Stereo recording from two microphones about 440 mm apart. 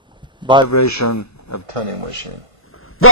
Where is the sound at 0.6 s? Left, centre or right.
Left.